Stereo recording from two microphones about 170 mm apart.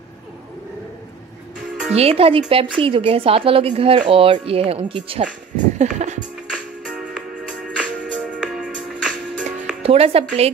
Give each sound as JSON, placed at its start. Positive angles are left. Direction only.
{"t": 2.0, "sound": "speech", "side_deg": -35}
{"t": 5.8, "sound": "music", "side_deg": -45}
{"t": 6.5, "sound": "music", "side_deg": 0}
{"t": 9.8, "sound": "speech", "side_deg": -35}